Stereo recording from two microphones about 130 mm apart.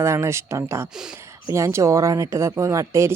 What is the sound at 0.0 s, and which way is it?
Speech, 20° right (ahead or behind).